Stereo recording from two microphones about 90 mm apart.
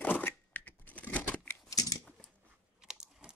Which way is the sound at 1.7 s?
40° left (ahead or behind).